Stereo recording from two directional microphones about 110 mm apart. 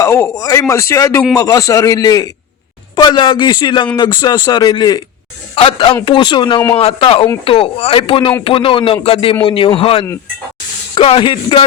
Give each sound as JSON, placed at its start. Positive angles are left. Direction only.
{"t": 0.0, "sound": "speech", "side_deg": 25}
{"t": 2.9, "sound": "a man's voice", "side_deg": 45}
{"t": 5.5, "sound": "a man's voice", "side_deg": 50}
{"t": 6.7, "sound": "a man's voice", "side_deg": 65}